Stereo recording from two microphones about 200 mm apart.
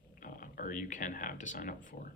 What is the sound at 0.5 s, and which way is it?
Speech, 45° left (ahead or behind).